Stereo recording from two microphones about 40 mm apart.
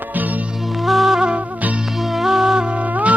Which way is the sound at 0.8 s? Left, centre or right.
Centre.